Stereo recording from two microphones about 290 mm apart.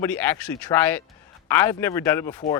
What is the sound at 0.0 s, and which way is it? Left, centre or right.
Speech, centre.